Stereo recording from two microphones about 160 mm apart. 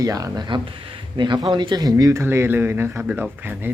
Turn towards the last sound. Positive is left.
turn(degrees=-10)  # may be behind; listen again after turning